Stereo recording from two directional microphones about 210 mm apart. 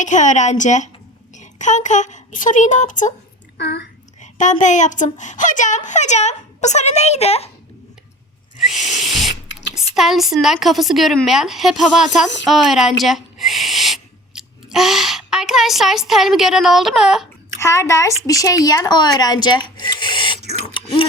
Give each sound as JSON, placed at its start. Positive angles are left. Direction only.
{"t": 0.0, "sound": "a woman's voice", "side_deg": 35}
{"t": 3.6, "sound": "a woman's voice", "side_deg": 55}
{"t": 4.2, "sound": "a woman's voice", "side_deg": 35}
{"t": 8.5, "sound": "a sound", "side_deg": 0}
{"t": 9.0, "sound": "a woman's voice", "side_deg": 0}
{"t": 9.5, "sound": "a sound", "side_deg": 60}
{"t": 9.9, "sound": "a woman's voice", "side_deg": 0}
{"t": 12.5, "sound": "owl", "side_deg": 0}
{"t": 17.6, "sound": "speech", "side_deg": 15}
{"t": 19.8, "sound": "a sound", "side_deg": 20}
{"t": 20.5, "sound": "printer", "side_deg": 25}